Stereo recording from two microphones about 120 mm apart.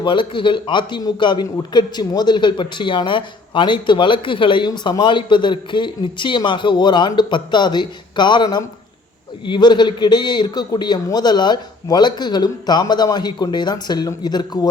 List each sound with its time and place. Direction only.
0.0 s a man's voice: 40° left (ahead or behind)